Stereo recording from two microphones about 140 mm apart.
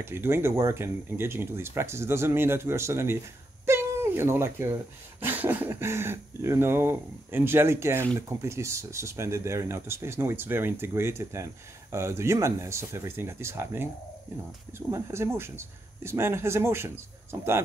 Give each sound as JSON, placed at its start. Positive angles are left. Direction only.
{"t": 0.0, "sound": "speech", "side_deg": -15}
{"t": 3.6, "sound": "a sound", "side_deg": -20}
{"t": 5.2, "sound": "speech", "side_deg": -15}
{"t": 14.9, "sound": "speech", "side_deg": -20}